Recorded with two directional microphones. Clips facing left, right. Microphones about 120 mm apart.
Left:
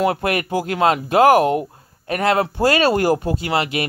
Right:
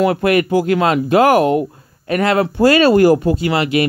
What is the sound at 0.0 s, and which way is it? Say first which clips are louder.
Speech: right 5 dB; 35° left (ahead or behind).